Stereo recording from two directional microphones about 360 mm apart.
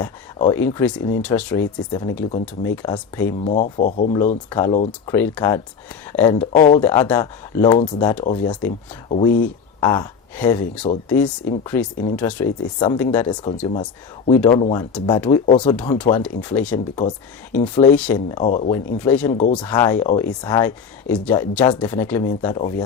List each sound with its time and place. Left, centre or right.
0.0 s speech: centre
4.4 s speech: centre
18.9 s speech: centre
19.3 s speech: centre
19.5 s speech: centre